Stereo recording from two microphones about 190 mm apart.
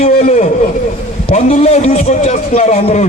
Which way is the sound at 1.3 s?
35° left (ahead or behind).